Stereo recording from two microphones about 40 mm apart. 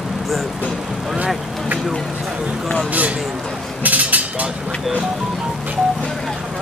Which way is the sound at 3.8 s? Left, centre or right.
Right.